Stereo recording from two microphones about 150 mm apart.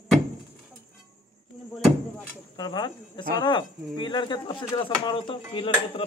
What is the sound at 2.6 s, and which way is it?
Speech, 30° left (ahead or behind).